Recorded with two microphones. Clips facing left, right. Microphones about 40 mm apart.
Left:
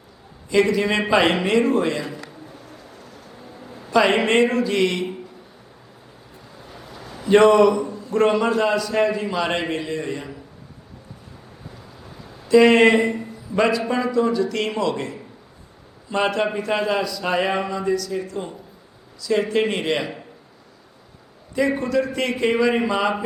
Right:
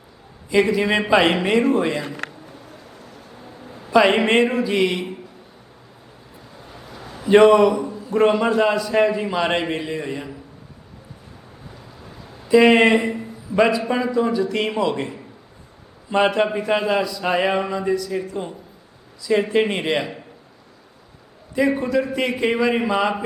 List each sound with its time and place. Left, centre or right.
0.5 s speech: centre
2.2 s a sound: right
3.0 s a sound: centre
6.7 s a man's voice: centre
11.7 s speech: centre
21.8 s speech: centre